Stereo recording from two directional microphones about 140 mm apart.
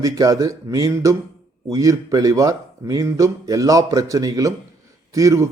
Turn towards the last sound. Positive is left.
turn(degrees=-25)  # may be behind; listen again after turning